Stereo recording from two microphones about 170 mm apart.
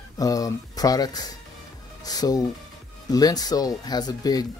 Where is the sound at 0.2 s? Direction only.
20° left (ahead or behind).